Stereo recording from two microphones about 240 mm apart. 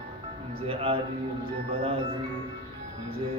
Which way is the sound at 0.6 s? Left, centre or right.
Right.